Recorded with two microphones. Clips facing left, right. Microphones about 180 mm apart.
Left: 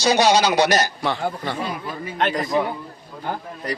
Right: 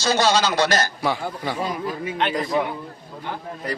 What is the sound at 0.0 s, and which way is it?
Speech, 15° left (ahead or behind).